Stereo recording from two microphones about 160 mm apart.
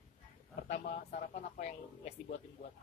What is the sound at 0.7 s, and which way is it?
Speech, 45° left (ahead or behind).